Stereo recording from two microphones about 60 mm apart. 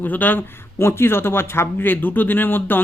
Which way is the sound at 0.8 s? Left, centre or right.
Left.